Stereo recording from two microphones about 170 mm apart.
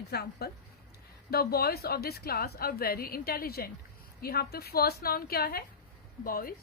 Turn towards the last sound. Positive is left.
turn(degrees=60)  # may be behind; listen again after turning